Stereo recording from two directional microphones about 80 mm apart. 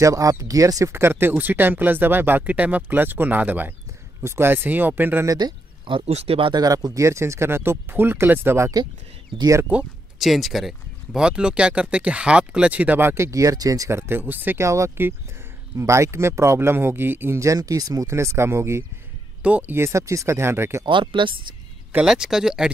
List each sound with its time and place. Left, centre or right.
0.0 s speech: right
0.9 s speech: right
5.4 s speech: right
6.6 s speech: right
9.7 s speech: centre
10.1 s speech: centre
13.0 s speech: right
13.8 s speech: right
14.6 s speech: right
17.4 s speech: right
19.4 s speech: centre
19.7 s speech: right
20.8 s speech: right
21.9 s speech: centre